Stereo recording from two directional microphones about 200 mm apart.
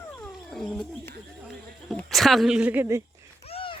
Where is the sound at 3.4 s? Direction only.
30° left (ahead or behind).